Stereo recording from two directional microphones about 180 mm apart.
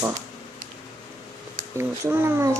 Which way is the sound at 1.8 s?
15° right (ahead or behind).